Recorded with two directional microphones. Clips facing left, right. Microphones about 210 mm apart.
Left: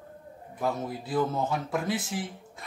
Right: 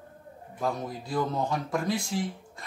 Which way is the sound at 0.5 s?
5° left (ahead or behind).